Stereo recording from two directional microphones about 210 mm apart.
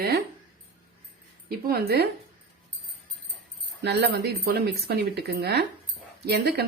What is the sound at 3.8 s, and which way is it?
Speech, 50° right (ahead or behind).